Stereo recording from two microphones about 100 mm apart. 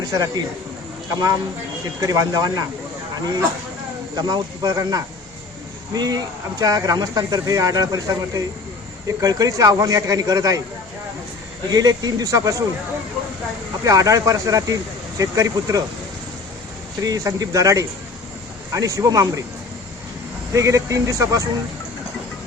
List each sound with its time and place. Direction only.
0.0 s speech: 40° right (ahead or behind)
2.0 s speech: 35° right (ahead or behind)
4.1 s speech: 40° right (ahead or behind)
11.7 s speech: 40° right (ahead or behind)
13.8 s speech: 35° right (ahead or behind)
17.0 s speech: 35° right (ahead or behind)
20.5 s speech: 30° right (ahead or behind)